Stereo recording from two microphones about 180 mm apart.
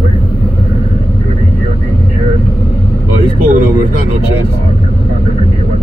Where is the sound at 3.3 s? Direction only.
50° right (ahead or behind).